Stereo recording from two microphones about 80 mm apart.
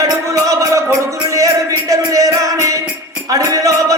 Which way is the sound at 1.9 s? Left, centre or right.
Right.